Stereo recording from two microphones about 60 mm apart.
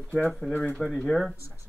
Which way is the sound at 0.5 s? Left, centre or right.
Left.